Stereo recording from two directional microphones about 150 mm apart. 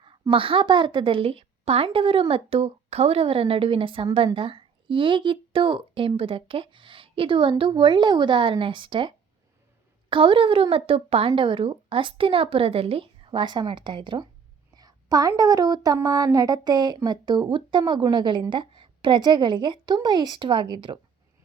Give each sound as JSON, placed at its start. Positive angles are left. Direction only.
{"t": 0.0, "sound": "a woman's voice", "side_deg": -35}